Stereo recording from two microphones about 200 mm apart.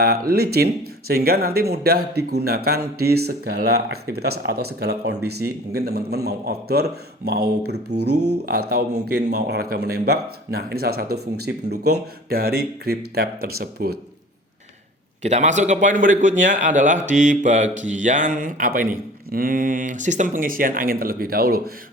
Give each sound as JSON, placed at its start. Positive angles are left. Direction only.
{"t": 0.0, "sound": "speech", "side_deg": -50}
{"t": 15.2, "sound": "a man's voice", "side_deg": -35}